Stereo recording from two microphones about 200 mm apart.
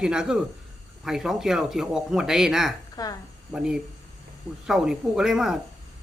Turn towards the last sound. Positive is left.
turn(degrees=0)  # may be behind; listen again after turning